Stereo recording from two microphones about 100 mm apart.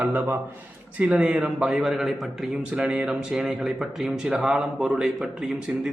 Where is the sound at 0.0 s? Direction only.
20° right (ahead or behind).